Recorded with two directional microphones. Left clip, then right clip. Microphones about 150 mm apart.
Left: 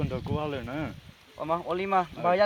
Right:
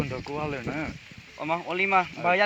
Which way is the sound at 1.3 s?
50° left (ahead or behind).